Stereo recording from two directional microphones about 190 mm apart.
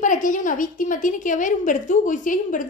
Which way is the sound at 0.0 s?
45° left (ahead or behind).